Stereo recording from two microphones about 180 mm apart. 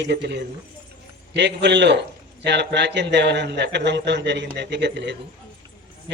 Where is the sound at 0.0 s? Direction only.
70° right (ahead or behind).